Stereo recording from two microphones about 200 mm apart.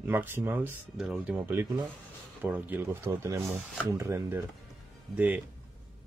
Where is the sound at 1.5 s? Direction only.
15° right (ahead or behind).